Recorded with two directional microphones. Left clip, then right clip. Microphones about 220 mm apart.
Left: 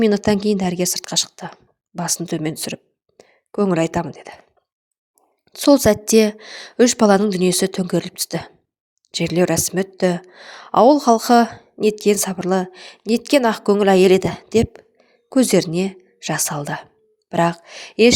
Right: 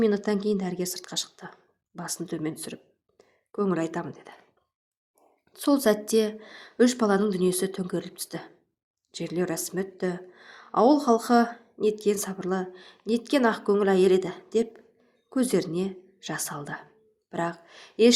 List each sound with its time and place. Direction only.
0.0 s a woman's voice: 35° left (ahead or behind)
5.5 s a woman's voice: 35° left (ahead or behind)